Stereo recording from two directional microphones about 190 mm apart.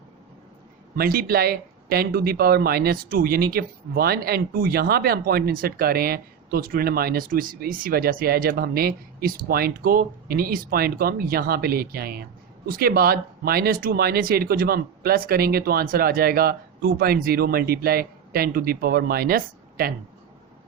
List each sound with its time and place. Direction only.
0.9 s speech: 50° right (ahead or behind)